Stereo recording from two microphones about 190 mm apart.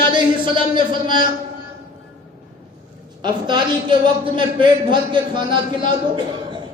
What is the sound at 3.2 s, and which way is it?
A man's voice, 25° right (ahead or behind).